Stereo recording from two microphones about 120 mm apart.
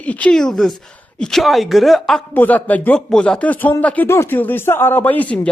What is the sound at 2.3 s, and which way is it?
Speech, 15° left (ahead or behind).